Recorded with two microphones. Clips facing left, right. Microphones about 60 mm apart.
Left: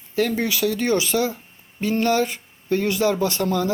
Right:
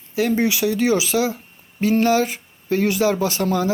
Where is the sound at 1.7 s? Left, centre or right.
Centre.